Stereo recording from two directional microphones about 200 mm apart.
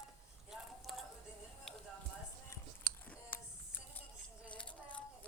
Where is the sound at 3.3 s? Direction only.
10° left (ahead or behind).